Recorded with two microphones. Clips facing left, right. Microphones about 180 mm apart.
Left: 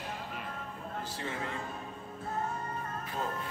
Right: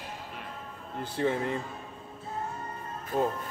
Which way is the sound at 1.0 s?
55° right (ahead or behind).